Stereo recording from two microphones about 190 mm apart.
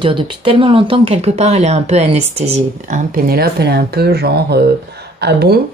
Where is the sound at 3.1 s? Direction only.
55° right (ahead or behind).